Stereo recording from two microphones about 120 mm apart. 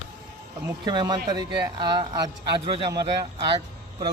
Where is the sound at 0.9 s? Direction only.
35° right (ahead or behind).